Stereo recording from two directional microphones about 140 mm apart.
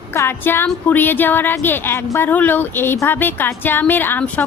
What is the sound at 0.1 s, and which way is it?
A woman's voice, 15° left (ahead or behind).